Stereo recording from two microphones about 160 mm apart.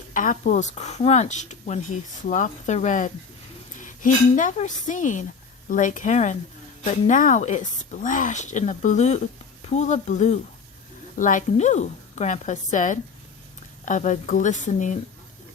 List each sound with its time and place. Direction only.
0.1 s speech: 55° left (ahead or behind)